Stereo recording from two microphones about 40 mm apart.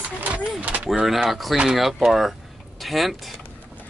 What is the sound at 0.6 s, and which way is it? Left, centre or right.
Power windows, right.